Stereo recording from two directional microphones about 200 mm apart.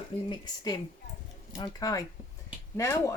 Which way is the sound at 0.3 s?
20° left (ahead or behind).